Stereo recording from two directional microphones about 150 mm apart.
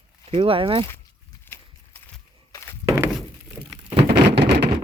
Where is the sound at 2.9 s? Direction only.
20° right (ahead or behind).